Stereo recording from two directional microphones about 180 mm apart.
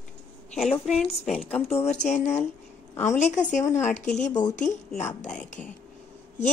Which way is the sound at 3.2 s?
40° left (ahead or behind).